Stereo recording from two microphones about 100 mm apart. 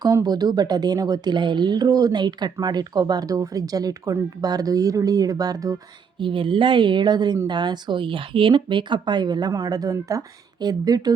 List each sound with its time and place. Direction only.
0.1 s speech: 40° right (ahead or behind)
6.1 s speech: 60° right (ahead or behind); by 11.1 s 40° right (ahead or behind)